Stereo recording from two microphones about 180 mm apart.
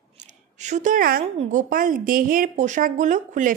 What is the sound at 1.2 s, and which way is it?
Speech, 40° right (ahead or behind).